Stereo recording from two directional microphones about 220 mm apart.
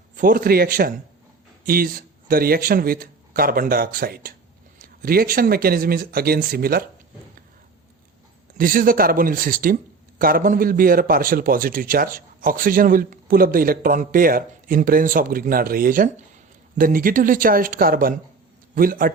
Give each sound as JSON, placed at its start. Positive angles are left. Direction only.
{"t": 0.2, "sound": "speech", "side_deg": -40}
{"t": 8.5, "sound": "speech", "side_deg": -40}